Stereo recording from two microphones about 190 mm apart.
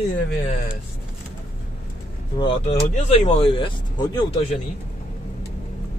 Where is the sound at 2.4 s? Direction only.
30° left (ahead or behind).